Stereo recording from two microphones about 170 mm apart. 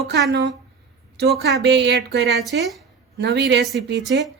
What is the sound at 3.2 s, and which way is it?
A woman's voice, 85° right.